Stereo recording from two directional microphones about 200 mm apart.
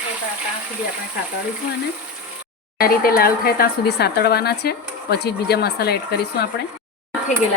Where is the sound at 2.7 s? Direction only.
50° left (ahead or behind).